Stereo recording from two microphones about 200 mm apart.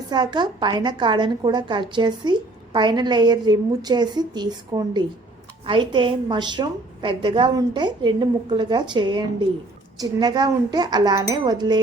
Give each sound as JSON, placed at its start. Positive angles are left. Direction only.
{"t": 0.1, "sound": "a woman's voice", "side_deg": -20}